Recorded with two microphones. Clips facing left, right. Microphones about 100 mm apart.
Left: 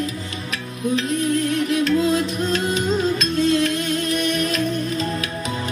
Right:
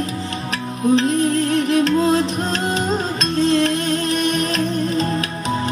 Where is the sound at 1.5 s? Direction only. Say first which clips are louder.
Right 3 dB; 35° right (ahead or behind).